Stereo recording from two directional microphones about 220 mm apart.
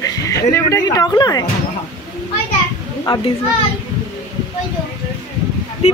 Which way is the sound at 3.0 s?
20° left (ahead or behind).